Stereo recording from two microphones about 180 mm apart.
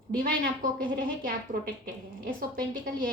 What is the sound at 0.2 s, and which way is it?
A woman's voice, 50° right (ahead or behind).